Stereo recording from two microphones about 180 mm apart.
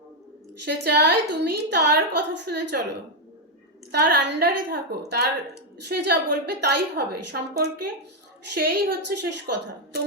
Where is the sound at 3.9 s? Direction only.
65° right (ahead or behind).